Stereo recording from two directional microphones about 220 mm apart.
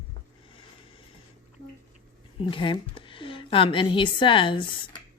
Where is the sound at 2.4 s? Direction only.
20° left (ahead or behind).